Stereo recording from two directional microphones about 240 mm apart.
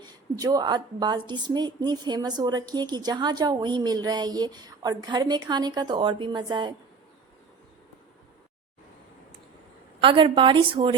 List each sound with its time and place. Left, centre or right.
0.0 s a woman's voice: centre
10.0 s a woman's voice: right